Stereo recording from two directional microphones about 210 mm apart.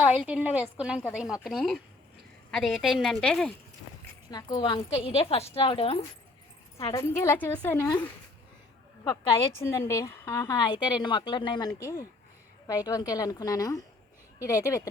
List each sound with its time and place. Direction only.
0.0 s a woman's voice: 5° right (ahead or behind)
4.3 s a woman's voice: 20° left (ahead or behind)
6.7 s a woman's voice: 15° left (ahead or behind)
9.6 s a woman's voice: 15° left (ahead or behind)